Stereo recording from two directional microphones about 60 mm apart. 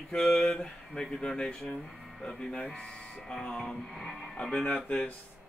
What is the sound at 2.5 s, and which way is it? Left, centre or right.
Speech, centre.